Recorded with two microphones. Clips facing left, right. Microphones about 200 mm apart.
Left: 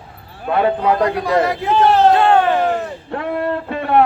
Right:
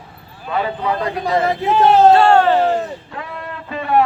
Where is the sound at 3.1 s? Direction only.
60° left (ahead or behind).